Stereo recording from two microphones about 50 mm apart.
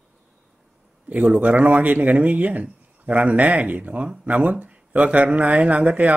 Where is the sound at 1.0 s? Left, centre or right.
Right.